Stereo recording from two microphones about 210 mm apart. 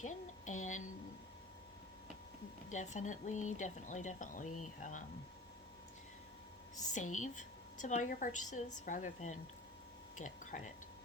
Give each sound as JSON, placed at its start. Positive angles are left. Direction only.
{"t": 0.0, "sound": "a sound", "side_deg": 35}
{"t": 2.6, "sound": "speech", "side_deg": 35}
{"t": 6.9, "sound": "speech", "side_deg": 35}